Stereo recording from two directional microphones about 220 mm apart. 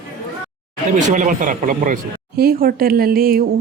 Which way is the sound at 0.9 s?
35° right (ahead or behind).